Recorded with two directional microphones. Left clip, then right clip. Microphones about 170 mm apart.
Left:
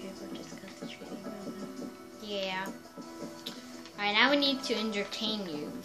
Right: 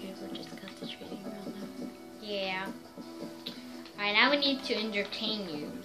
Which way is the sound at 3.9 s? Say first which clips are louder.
Even; 30° left (ahead or behind).